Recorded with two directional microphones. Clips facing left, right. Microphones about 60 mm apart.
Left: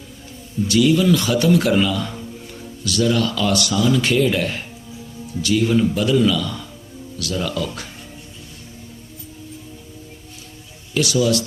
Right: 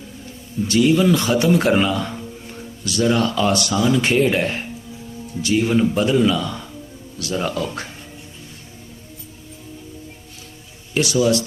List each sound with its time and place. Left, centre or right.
0.7 s a man's voice: right
10.9 s a man's voice: right